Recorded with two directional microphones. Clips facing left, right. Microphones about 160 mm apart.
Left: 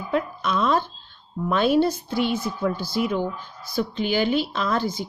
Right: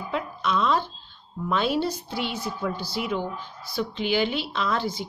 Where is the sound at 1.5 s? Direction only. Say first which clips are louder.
Left 5 dB; 50° left (ahead or behind).